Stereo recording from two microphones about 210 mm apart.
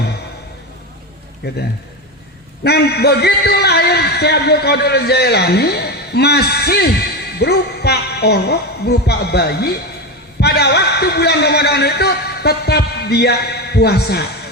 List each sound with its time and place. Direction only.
1.4 s a man's voice: 50° left (ahead or behind)
2.6 s a man's voice: 50° left (ahead or behind)